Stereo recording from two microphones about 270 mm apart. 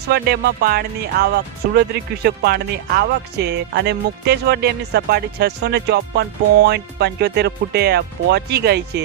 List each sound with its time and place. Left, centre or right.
0.1 s speech: right